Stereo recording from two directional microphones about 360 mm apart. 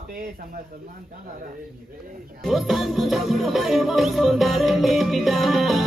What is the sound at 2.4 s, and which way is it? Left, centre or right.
Music, centre.